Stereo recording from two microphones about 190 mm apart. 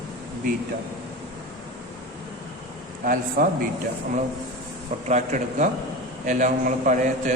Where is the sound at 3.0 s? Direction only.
45° right (ahead or behind).